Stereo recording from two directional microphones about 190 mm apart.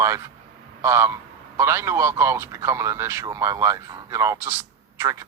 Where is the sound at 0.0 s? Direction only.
15° right (ahead or behind).